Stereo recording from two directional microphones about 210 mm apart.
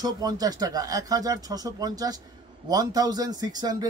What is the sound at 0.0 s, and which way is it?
Speech, 20° right (ahead or behind).